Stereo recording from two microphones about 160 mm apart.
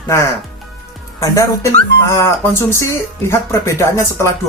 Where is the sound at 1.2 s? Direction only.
20° left (ahead or behind).